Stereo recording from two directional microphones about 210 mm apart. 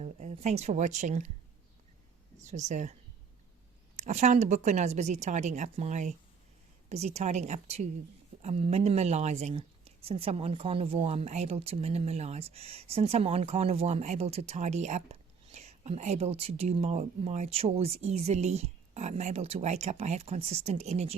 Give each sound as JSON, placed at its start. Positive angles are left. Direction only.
{"t": 0.0, "sound": "speech", "side_deg": -30}
{"t": 2.4, "sound": "speech", "side_deg": -35}
{"t": 3.9, "sound": "speech", "side_deg": -35}